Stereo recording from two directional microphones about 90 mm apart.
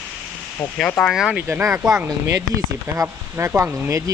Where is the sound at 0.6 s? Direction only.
10° left (ahead or behind).